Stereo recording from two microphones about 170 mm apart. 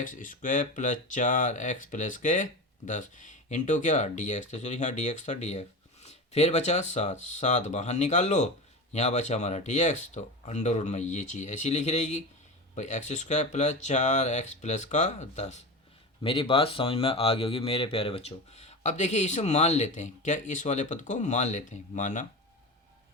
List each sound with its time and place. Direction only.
0.0 s speech: 50° left (ahead or behind)
16.2 s speech: 30° left (ahead or behind)